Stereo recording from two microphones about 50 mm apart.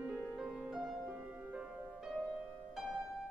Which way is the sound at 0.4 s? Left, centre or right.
Centre.